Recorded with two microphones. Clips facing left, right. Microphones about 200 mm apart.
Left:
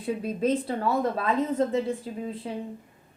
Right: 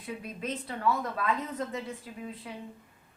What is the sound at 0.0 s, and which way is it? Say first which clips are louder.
A woman's voice: left 11 dB; 30° left (ahead or behind).